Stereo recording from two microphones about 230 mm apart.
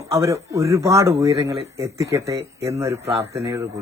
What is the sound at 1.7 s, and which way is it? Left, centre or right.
Speech, centre.